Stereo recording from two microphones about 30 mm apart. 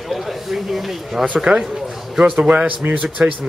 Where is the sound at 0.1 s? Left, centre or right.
Centre.